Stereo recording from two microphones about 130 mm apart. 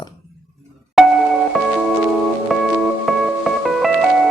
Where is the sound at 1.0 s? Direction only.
5° right (ahead or behind).